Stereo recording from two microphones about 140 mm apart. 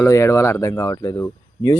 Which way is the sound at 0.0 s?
20° left (ahead or behind).